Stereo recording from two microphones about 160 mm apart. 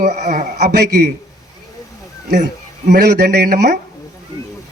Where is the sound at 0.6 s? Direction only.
90° right.